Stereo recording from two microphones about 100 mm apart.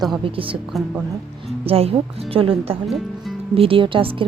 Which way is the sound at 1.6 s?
75° right (ahead or behind).